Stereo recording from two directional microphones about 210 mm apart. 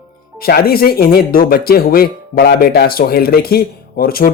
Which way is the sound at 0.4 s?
45° left (ahead or behind).